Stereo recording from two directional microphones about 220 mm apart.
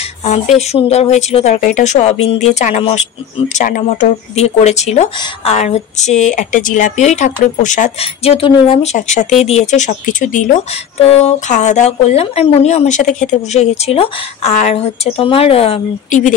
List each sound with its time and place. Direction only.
0.2 s speech: 30° left (ahead or behind)